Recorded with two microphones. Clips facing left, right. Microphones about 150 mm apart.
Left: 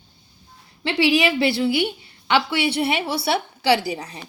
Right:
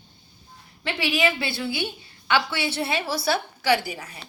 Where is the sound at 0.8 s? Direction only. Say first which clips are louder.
Left 5 dB; 30° left (ahead or behind).